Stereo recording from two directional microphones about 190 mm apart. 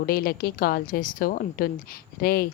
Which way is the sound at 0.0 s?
50° left (ahead or behind).